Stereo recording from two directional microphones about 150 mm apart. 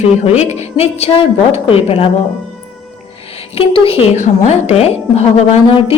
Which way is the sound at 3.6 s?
40° left (ahead or behind).